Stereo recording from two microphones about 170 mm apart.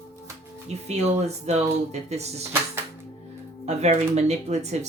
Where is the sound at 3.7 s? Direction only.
40° right (ahead or behind).